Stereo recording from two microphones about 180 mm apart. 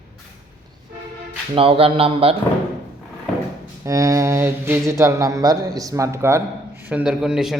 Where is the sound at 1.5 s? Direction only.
30° right (ahead or behind).